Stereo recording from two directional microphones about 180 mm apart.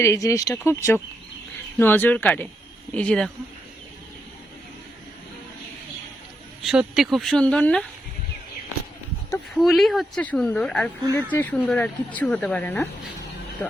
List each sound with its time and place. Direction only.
0.0 s speech: 15° left (ahead or behind)
1.8 s speech: 10° left (ahead or behind)
6.6 s speech: centre (ahead or behind)
9.6 s speech: centre (ahead or behind)